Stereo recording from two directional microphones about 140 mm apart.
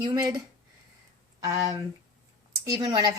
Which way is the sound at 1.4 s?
25° right (ahead or behind).